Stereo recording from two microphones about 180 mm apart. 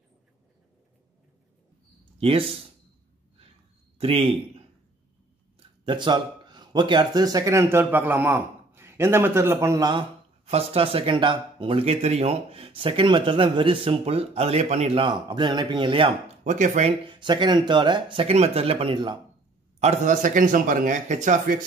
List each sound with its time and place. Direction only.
2.1 s speech: 30° right (ahead or behind)
4.0 s speech: 30° right (ahead or behind)
5.9 s a man's voice: 25° right (ahead or behind)
10.4 s speech: 35° right (ahead or behind)
16.4 s speech: 45° right (ahead or behind)
17.0 s speech: 25° right (ahead or behind)
19.8 s speech: 40° right (ahead or behind)